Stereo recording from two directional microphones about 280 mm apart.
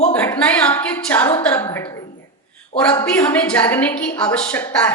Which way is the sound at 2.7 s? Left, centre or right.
Left.